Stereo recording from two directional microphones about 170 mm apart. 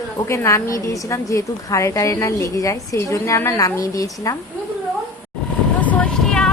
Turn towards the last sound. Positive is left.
turn(degrees=5)  # may be behind; listen again after turning